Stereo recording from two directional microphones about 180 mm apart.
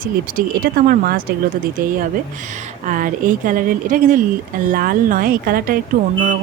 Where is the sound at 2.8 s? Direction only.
45° right (ahead or behind).